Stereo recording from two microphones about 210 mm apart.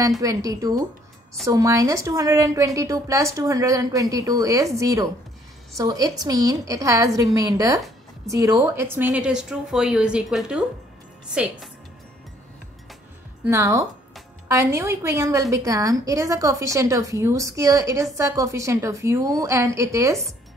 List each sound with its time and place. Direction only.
0.2 s a woman's voice: 15° right (ahead or behind)
13.5 s a woman's voice: 15° right (ahead or behind)